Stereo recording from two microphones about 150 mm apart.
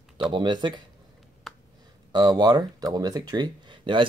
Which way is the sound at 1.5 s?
Centre (ahead or behind).